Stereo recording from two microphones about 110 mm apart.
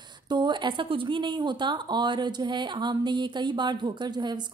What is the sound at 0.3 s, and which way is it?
Speech, 45° right (ahead or behind).